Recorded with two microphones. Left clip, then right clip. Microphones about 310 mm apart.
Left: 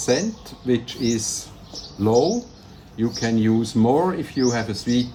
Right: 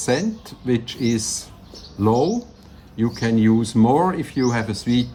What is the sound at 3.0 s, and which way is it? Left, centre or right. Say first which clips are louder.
Speech: right 2 dB; centre.